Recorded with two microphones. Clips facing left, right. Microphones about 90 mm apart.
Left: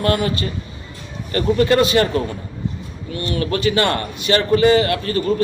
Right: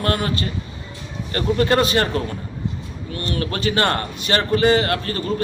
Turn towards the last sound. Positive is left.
turn(degrees=-35)  # may be behind; listen again after turning